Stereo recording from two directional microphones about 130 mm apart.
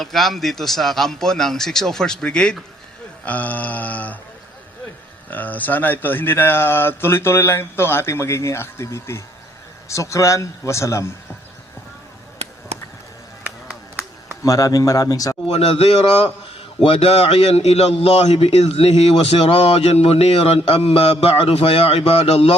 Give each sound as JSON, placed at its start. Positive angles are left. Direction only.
{"t": 0.0, "sound": "a man's voice", "side_deg": 0}
{"t": 3.2, "sound": "a sound", "side_deg": 10}
{"t": 5.3, "sound": "speech", "side_deg": 15}
{"t": 12.4, "sound": "basketball bounce", "side_deg": -55}
{"t": 13.4, "sound": "a sound", "side_deg": -10}
{"t": 14.4, "sound": "speech", "side_deg": 25}
{"t": 15.5, "sound": "a man's voice", "side_deg": 50}